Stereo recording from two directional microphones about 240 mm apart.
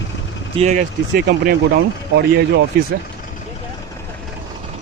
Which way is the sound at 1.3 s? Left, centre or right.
Right.